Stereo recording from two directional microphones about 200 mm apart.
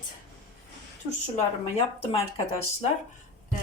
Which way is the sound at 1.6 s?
30° left (ahead or behind).